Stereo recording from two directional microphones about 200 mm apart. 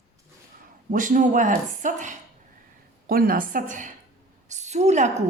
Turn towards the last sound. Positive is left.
turn(degrees=-35)  # may be behind; listen again after turning